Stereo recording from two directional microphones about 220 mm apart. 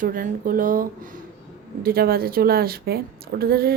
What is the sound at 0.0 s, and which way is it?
Speech, 40° right (ahead or behind).